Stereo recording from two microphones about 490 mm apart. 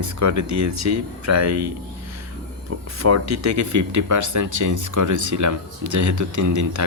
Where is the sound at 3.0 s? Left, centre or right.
Right.